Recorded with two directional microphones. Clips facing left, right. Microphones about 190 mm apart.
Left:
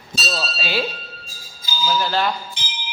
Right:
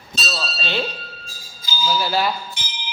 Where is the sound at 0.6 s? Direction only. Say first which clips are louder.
Even; 10° left (ahead or behind).